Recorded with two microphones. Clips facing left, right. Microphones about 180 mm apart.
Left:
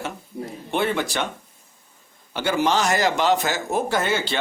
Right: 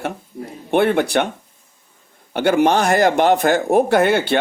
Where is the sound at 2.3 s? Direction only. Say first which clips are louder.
Right 6 dB; 60° right (ahead or behind).